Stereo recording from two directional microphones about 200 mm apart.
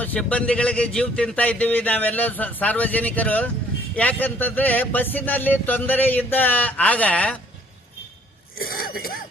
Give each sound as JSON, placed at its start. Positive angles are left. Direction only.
{"t": 0.0, "sound": "speech", "side_deg": 5}
{"t": 8.5, "sound": "throat clearing", "side_deg": 45}